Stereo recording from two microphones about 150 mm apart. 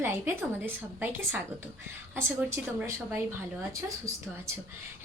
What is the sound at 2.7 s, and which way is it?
A woman's voice, 15° right (ahead or behind).